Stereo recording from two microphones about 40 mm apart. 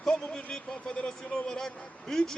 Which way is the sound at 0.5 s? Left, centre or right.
Left.